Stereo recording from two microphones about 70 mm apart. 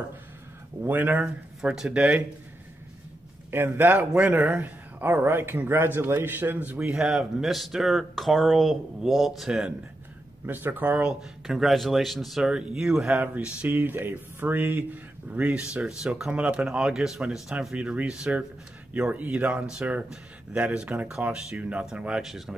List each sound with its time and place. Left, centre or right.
0.8 s speech: right
1.9 s speech: centre
3.5 s speech: right
6.9 s speech: centre
10.4 s speech: right
11.1 s speech: centre
12.4 s speech: centre
13.1 s speech: right
16.3 s speech: right
22.2 s speech: centre